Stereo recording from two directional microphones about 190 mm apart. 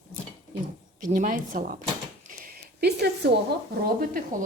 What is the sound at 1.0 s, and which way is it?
Speech, 45° right (ahead or behind).